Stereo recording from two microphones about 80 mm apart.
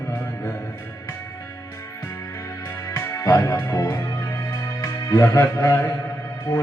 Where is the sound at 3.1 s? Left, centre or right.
Left.